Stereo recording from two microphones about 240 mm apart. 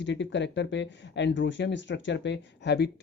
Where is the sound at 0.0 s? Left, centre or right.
Left.